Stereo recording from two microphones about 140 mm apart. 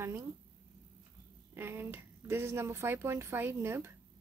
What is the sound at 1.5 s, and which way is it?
Speech, 15° right (ahead or behind).